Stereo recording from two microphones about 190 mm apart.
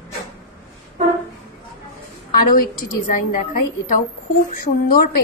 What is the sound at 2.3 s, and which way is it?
A woman's voice, 50° left (ahead or behind).